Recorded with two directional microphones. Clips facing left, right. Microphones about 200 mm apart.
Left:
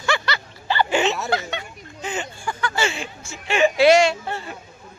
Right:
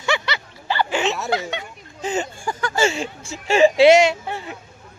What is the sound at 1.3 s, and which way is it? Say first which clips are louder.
Speech: right 1 dB; 15° right (ahead or behind).